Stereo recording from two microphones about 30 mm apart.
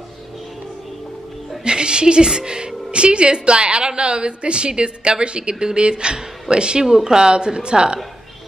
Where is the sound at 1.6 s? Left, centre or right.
Right.